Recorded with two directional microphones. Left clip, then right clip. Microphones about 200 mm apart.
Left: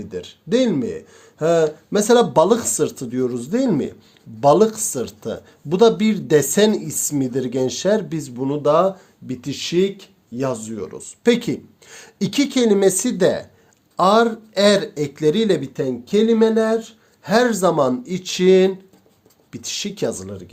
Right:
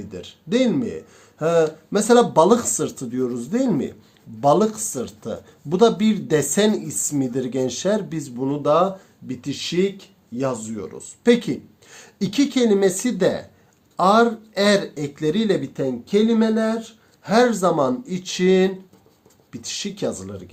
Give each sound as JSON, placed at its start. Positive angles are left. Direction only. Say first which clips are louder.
{"t": 0.1, "sound": "speech", "louder": "left 3 dB", "side_deg": 35}